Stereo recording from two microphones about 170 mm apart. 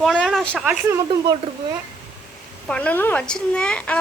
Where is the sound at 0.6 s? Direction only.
15° right (ahead or behind).